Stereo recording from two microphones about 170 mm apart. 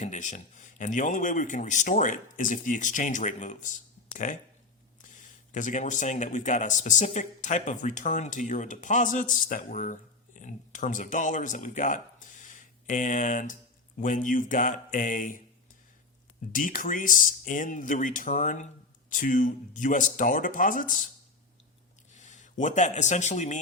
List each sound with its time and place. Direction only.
0.0 s a man's voice: 45° left (ahead or behind)
16.5 s a man's voice: 55° left (ahead or behind)
22.1 s a man's voice: 45° left (ahead or behind)